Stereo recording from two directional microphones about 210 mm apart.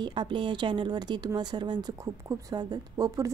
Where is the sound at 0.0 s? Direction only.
20° right (ahead or behind).